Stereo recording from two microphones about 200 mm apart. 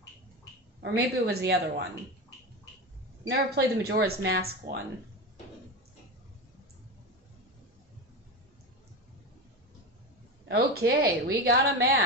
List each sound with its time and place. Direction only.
0.7 s speech: 55° right (ahead or behind)
3.3 s speech: 50° right (ahead or behind)
10.5 s speech: 50° right (ahead or behind)